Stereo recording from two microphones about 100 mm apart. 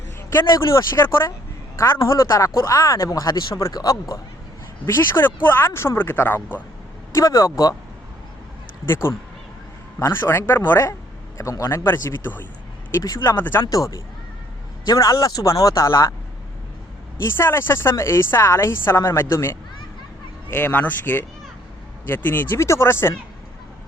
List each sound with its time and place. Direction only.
0.5 s a woman's voice: 30° left (ahead or behind)
4.9 s a woman's voice: 25° left (ahead or behind)
7.1 s speech: 30° left (ahead or behind)
8.9 s a woman's voice: 25° left (ahead or behind)
11.3 s a woman's voice: 35° left (ahead or behind)
13.7 s speech: 35° left (ahead or behind)
17.3 s a woman's voice: 25° left (ahead or behind)